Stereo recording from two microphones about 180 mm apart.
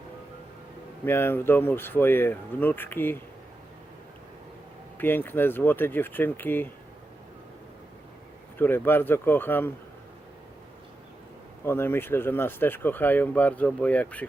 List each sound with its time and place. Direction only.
1.0 s speech: 10° left (ahead or behind)
4.9 s speech: 10° left (ahead or behind)
8.5 s speech: 10° left (ahead or behind)
11.6 s speech: 15° left (ahead or behind)